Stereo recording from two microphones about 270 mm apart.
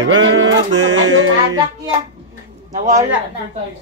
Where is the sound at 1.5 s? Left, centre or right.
Centre.